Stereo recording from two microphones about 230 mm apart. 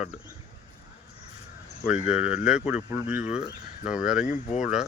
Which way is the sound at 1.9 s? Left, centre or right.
Centre.